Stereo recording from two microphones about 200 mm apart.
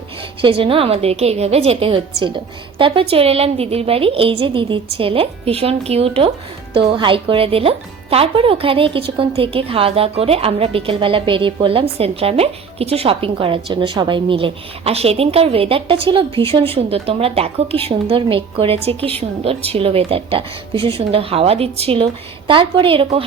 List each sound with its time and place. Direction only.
0.4 s a woman's voice: 25° right (ahead or behind)